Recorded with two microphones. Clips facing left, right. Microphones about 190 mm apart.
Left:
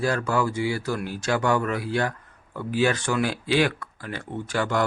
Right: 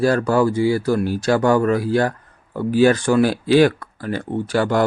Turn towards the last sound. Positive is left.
turn(degrees=-35)  # may be behind; listen again after turning